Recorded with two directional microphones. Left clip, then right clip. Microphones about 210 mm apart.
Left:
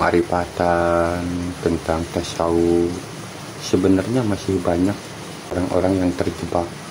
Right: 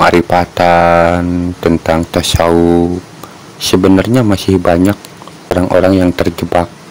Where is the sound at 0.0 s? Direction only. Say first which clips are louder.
Right 10 dB; 45° right (ahead or behind).